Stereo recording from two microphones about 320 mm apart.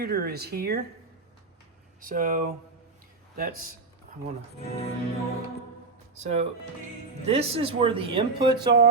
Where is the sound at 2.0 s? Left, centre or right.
Right.